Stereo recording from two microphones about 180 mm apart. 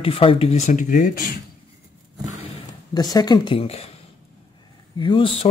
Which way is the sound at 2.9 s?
20° left (ahead or behind).